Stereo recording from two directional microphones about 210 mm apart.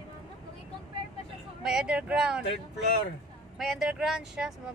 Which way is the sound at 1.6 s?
5° right (ahead or behind).